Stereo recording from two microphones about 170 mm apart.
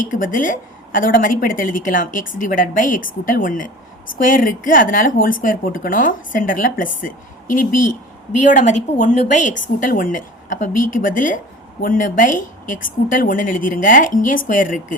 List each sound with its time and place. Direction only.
0.1 s a woman's voice: 50° left (ahead or behind)
8.4 s a woman's voice: 45° left (ahead or behind)